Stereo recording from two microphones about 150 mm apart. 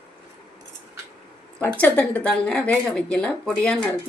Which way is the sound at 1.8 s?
10° left (ahead or behind).